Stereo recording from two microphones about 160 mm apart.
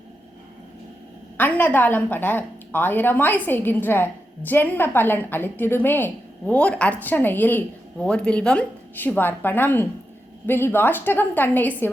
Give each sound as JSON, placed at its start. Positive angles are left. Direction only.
{"t": 1.4, "sound": "a woman's voice", "side_deg": 10}